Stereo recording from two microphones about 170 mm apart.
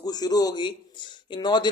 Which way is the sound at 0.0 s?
25° left (ahead or behind).